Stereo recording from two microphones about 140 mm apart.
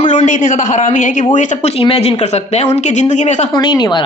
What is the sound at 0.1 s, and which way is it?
A man's voice, 60° left (ahead or behind).